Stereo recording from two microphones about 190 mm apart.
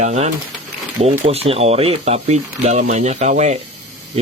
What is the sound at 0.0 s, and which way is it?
Speech, 35° right (ahead or behind).